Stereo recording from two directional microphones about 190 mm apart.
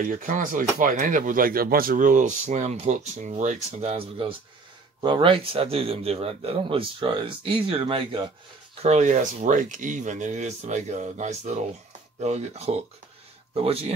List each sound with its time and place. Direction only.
0.0 s speech: 45° right (ahead or behind)